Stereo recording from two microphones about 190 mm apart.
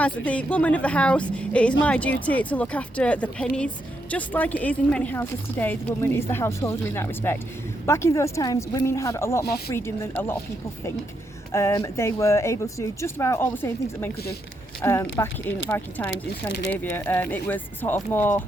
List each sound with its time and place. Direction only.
0.0 s speech: 5° left (ahead or behind)
11.5 s speech: 15° left (ahead or behind)
16.5 s speech: 70° left (ahead or behind)
16.7 s speech: 10° left (ahead or behind)